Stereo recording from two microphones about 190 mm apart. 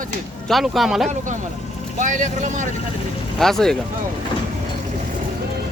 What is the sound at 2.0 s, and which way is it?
Speech, 40° right (ahead or behind).